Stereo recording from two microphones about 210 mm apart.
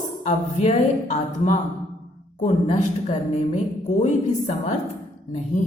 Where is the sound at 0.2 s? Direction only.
30° left (ahead or behind).